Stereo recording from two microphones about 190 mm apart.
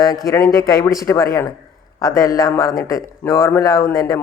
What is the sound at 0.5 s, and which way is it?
A man's voice, 15° left (ahead or behind).